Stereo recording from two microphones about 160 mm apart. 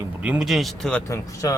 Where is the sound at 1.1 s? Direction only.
20° left (ahead or behind).